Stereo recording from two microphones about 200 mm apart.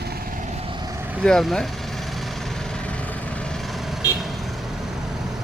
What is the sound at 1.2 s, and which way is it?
Speech, centre (ahead or behind).